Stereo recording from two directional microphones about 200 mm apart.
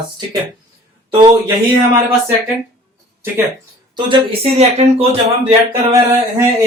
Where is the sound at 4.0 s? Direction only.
30° right (ahead or behind).